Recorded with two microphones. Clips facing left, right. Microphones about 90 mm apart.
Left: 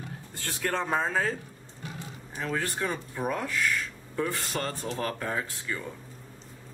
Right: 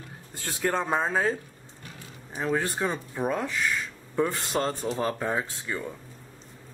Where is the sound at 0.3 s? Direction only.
15° right (ahead or behind).